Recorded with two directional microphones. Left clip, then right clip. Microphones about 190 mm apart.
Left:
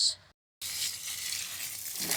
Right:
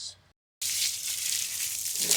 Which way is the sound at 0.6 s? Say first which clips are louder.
Right 5 dB; 60° right (ahead or behind).